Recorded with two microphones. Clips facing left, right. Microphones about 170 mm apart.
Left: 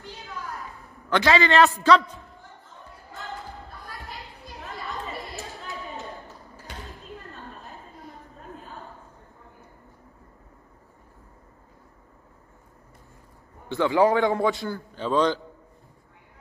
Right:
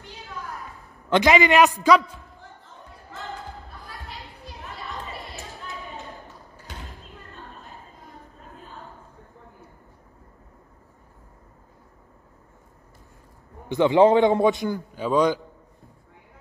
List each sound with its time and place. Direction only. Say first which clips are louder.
1.1 s a man's voice: right 2 dB; 15° right (ahead or behind)
3.8 s children playing: even; centre (ahead or behind)
13.7 s a man's voice: right 4 dB; 20° right (ahead or behind)